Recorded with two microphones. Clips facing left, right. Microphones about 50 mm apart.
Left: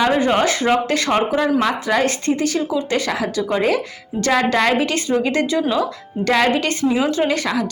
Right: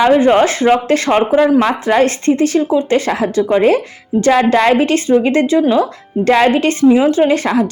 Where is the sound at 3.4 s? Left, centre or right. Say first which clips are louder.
Right 7 dB; right.